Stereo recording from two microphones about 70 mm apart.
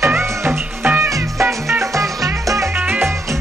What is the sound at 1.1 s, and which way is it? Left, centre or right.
Music, right.